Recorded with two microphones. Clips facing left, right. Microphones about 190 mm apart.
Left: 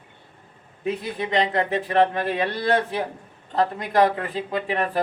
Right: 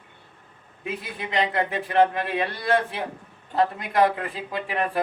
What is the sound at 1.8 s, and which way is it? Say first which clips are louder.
Speech: right 2 dB; 35° left (ahead or behind).